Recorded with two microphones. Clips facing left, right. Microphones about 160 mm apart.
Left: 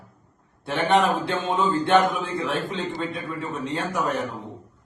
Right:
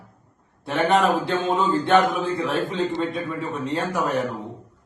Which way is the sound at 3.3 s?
40° right (ahead or behind).